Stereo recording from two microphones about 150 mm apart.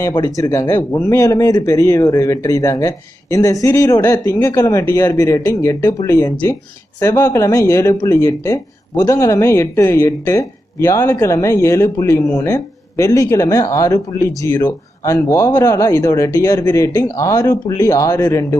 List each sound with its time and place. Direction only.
0.2 s speech: 25° left (ahead or behind)